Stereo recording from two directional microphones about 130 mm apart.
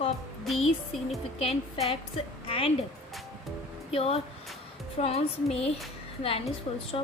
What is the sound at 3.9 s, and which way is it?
A woman's voice, 50° left (ahead or behind).